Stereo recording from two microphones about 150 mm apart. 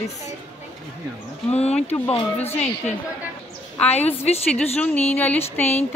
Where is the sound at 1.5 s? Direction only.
45° left (ahead or behind).